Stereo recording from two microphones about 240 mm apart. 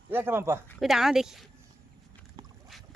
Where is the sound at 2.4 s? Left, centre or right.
Right.